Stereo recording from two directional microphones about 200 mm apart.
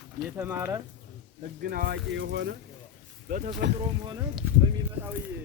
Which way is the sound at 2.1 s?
65° right (ahead or behind).